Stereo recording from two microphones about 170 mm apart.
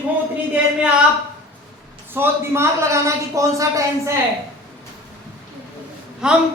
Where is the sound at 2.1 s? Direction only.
15° right (ahead or behind).